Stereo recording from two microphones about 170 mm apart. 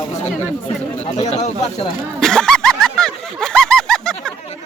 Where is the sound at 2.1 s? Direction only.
5° left (ahead or behind).